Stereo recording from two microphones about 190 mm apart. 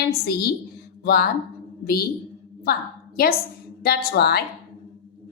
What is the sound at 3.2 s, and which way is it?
A woman's voice, 55° left (ahead or behind).